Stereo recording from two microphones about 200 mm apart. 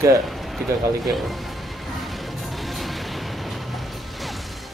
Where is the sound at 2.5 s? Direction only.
Centre (ahead or behind).